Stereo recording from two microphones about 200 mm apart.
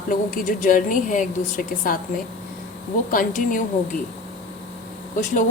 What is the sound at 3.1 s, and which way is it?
Speech, 40° left (ahead or behind).